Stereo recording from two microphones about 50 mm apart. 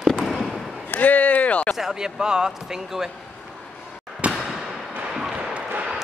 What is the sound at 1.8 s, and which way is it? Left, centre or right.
Speech, centre.